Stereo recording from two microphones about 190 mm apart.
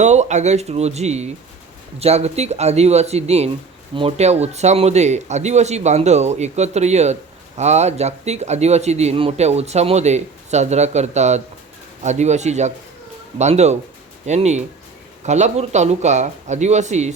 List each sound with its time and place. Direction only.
0.0 s speech: 35° right (ahead or behind)